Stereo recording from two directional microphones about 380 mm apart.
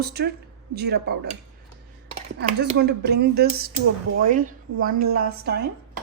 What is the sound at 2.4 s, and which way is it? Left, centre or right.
A woman's voice, right.